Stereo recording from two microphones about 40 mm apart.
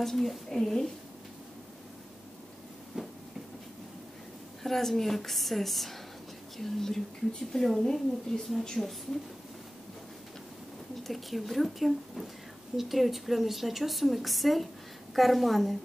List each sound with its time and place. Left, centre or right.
0.0 s speech: centre
2.9 s a sound: centre
4.6 s a woman's voice: centre
11.1 s a woman's voice: centre